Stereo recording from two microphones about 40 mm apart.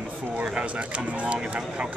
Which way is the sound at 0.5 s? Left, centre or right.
Right.